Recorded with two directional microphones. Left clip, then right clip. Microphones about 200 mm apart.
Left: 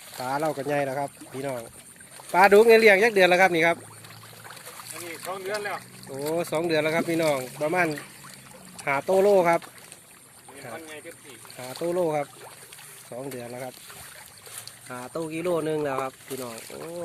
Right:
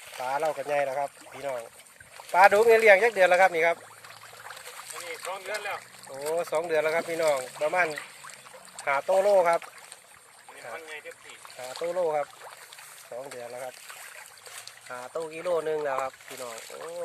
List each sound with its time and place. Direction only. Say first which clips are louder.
0.2 s speech: left 1 dB; centre (ahead or behind)
5.2 s speech: left 4 dB; 45° right (ahead or behind)
6.1 s speech: left 1 dB; centre (ahead or behind)
11.5 s speech: left 2 dB; 10° left (ahead or behind)
14.8 s speech: left 2 dB; centre (ahead or behind)